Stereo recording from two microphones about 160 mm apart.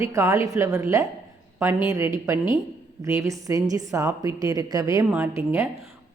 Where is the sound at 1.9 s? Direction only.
20° right (ahead or behind).